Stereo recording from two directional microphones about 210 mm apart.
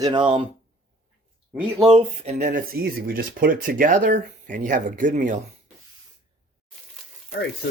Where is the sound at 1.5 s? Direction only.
5° right (ahead or behind).